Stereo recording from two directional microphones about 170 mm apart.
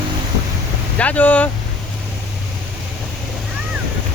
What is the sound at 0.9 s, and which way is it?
Speech, 10° left (ahead or behind).